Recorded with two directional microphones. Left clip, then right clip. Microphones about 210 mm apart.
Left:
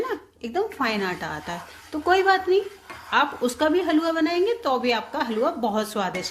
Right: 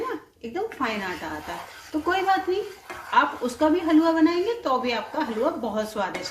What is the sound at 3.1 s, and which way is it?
A woman's voice, 50° left (ahead or behind).